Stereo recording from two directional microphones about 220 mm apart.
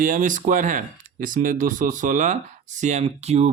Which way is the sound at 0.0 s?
35° right (ahead or behind).